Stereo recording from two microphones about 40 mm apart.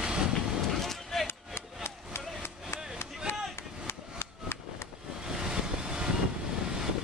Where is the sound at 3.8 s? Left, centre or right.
Left.